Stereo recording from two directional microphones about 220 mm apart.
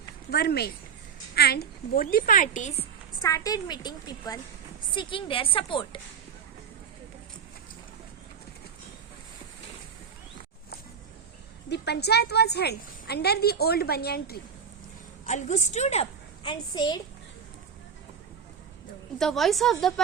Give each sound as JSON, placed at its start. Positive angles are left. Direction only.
{"t": 0.3, "sound": "a woman's voice", "side_deg": 45}
{"t": 3.2, "sound": "a woman's voice", "side_deg": 15}
{"t": 11.7, "sound": "a woman's voice", "side_deg": 50}
{"t": 15.3, "sound": "a woman's voice", "side_deg": 35}
{"t": 19.2, "sound": "a woman's voice", "side_deg": 0}